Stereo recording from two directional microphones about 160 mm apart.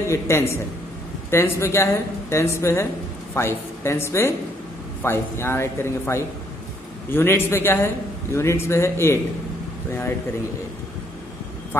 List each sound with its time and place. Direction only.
0.1 s a man's voice: 15° left (ahead or behind)